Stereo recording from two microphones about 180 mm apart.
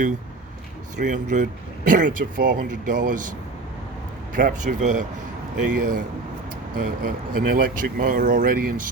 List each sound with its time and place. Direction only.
0.9 s speech: 45° right (ahead or behind)
4.4 s speech: 45° right (ahead or behind)